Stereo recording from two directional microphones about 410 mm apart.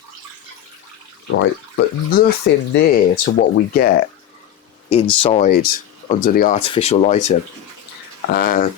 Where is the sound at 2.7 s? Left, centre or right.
Left.